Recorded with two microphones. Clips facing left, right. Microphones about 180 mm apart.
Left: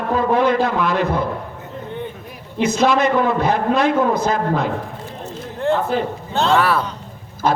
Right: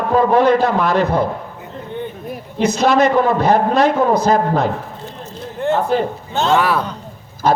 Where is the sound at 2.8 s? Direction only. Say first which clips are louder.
Right 4 dB; 45° right (ahead or behind).